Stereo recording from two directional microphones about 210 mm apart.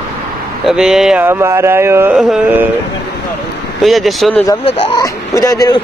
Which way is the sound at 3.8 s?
Centre (ahead or behind).